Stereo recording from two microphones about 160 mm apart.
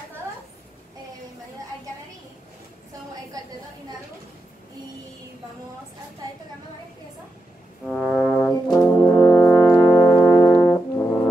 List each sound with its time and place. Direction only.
7.8 s brass instrument: 5° left (ahead or behind)
9.9 s music: 20° left (ahead or behind)
10.3 s brass instrument: 20° left (ahead or behind)